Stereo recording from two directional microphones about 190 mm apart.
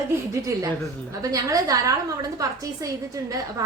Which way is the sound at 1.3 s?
20° right (ahead or behind).